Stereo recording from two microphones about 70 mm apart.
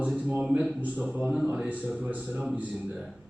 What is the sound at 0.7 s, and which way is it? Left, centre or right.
Speech, right.